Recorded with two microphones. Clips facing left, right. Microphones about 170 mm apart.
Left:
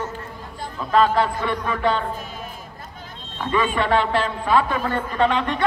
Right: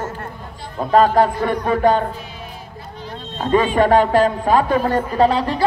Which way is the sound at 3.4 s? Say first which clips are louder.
Right 6 dB; 45° right (ahead or behind).